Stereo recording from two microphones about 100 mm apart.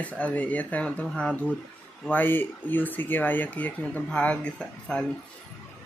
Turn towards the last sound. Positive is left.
turn(degrees=10)  # may be behind; listen again after turning